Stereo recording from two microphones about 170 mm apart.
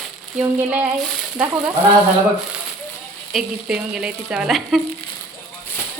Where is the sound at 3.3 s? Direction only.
Centre (ahead or behind).